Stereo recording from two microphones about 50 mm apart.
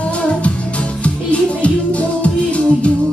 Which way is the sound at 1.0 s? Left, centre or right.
Left.